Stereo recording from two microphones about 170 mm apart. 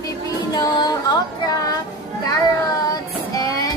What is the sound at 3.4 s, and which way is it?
Music, 20° left (ahead or behind).